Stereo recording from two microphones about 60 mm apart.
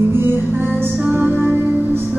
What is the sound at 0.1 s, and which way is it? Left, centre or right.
Music, right.